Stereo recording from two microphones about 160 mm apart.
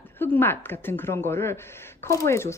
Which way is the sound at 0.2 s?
10° left (ahead or behind).